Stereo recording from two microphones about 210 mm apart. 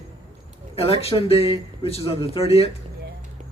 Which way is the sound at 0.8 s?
30° left (ahead or behind).